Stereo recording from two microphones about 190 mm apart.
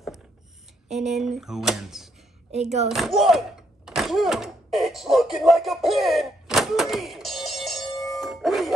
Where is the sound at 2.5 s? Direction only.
35° right (ahead or behind).